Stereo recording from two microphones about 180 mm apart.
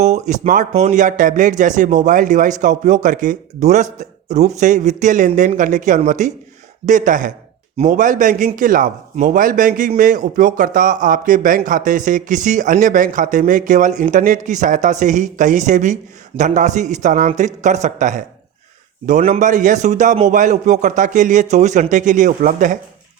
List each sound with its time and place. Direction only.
0.0 s speech: 40° right (ahead or behind)